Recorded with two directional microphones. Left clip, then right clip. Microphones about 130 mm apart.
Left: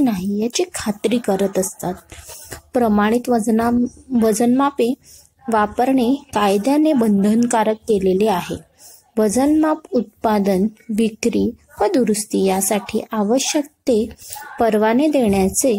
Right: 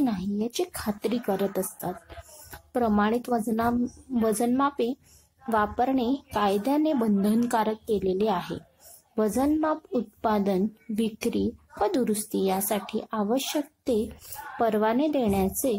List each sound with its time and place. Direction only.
0.0 s a woman's voice: 25° left (ahead or behind)